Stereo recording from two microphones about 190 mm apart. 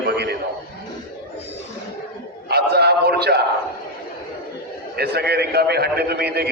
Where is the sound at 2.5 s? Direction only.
60° right (ahead or behind).